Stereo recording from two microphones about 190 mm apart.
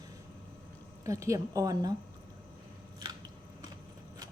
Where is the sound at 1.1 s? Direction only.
15° right (ahead or behind).